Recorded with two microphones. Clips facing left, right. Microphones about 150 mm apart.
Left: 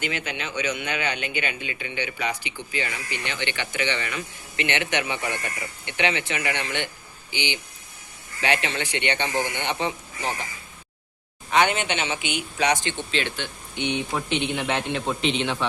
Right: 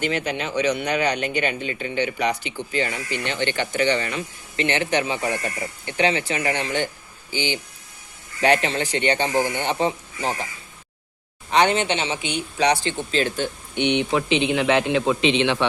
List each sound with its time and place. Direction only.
0.0 s speech: 40° right (ahead or behind)
11.5 s speech: 30° right (ahead or behind)
13.7 s a man's voice: 70° right (ahead or behind); by 15.6 s 85° right